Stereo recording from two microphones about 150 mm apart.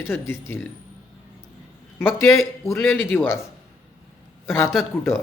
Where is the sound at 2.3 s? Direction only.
20° left (ahead or behind).